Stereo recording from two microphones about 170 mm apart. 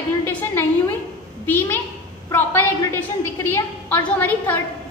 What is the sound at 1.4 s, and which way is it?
A woman's voice, 10° left (ahead or behind).